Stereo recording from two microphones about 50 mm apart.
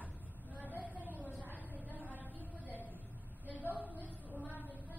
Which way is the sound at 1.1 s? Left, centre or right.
Left.